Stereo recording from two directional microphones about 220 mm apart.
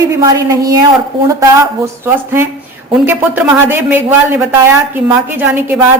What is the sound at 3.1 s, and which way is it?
Speech, 10° right (ahead or behind).